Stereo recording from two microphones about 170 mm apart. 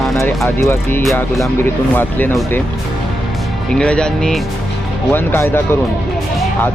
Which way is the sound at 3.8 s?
5° left (ahead or behind).